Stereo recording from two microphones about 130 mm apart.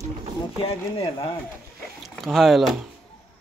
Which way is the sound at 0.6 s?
40° left (ahead or behind).